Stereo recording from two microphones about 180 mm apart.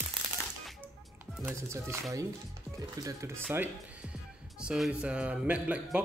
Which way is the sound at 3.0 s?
20° right (ahead or behind).